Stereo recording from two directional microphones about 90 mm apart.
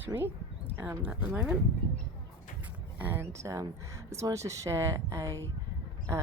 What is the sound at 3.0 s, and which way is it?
Speech, 25° right (ahead or behind).